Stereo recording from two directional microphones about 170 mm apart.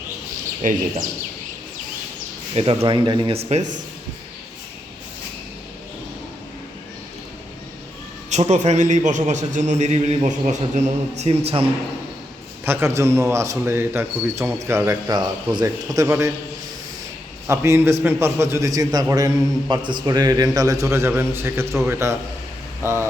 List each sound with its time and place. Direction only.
0.6 s a man's voice: 50° right (ahead or behind)
2.6 s speech: 30° right (ahead or behind)
8.3 s a man's voice: 40° right (ahead or behind)
12.6 s speech: 15° right (ahead or behind)
17.4 s a man's voice: 15° right (ahead or behind)